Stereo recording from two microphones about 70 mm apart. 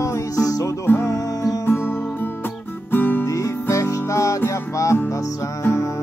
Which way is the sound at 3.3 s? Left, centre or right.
Left.